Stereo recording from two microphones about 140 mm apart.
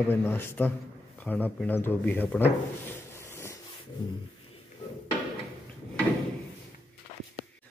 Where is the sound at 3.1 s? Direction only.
20° left (ahead or behind).